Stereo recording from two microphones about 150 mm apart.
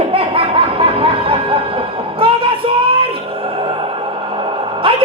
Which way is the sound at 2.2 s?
35° right (ahead or behind).